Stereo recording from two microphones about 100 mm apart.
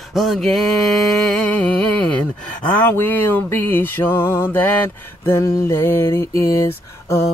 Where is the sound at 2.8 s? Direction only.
20° left (ahead or behind).